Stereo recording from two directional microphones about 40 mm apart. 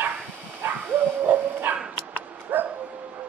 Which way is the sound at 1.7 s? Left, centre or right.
Right.